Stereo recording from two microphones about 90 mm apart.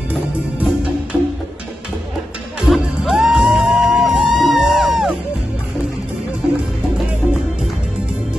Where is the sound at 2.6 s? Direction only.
5° right (ahead or behind).